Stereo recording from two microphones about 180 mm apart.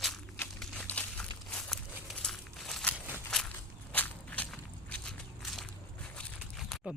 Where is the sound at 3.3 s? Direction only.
5° left (ahead or behind).